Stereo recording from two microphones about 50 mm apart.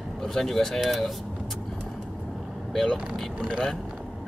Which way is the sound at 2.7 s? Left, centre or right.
Centre.